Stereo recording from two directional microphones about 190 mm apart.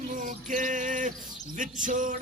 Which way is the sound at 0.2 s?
45° right (ahead or behind).